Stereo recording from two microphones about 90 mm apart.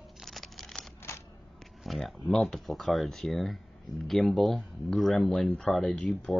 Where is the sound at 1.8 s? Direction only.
5° left (ahead or behind).